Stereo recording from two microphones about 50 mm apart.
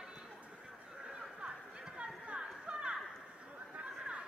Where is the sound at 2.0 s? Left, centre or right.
Right.